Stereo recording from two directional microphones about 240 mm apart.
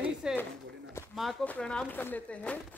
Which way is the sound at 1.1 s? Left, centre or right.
Centre.